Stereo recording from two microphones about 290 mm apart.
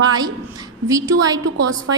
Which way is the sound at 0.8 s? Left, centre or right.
Centre.